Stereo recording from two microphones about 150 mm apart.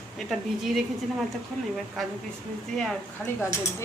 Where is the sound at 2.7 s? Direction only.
Centre (ahead or behind).